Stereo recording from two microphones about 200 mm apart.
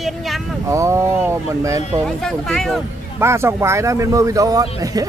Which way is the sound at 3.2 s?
15° right (ahead or behind).